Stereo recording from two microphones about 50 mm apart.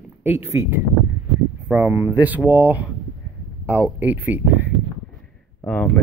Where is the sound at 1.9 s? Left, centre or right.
Right.